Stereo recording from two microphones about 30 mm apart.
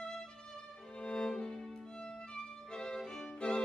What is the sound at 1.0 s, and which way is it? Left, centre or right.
Music, left.